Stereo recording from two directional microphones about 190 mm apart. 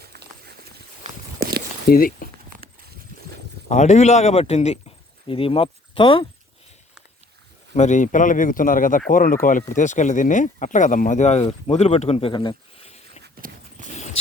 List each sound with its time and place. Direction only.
0.0 s clip-clop: 55° right (ahead or behind)
1.4 s walk: 55° right (ahead or behind)
1.9 s speech: 50° left (ahead or behind)
3.7 s speech: 40° left (ahead or behind)
7.7 s speech: 40° left (ahead or behind)
13.2 s clip-clop: 45° right (ahead or behind)